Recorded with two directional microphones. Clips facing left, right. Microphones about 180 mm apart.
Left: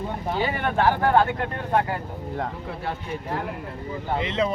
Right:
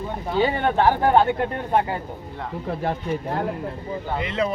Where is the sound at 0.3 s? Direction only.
25° right (ahead or behind).